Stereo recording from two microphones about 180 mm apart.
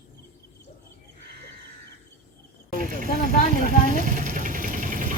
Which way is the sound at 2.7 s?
50° right (ahead or behind).